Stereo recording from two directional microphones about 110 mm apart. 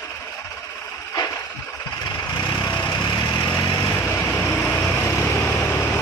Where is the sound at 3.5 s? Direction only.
25° left (ahead or behind).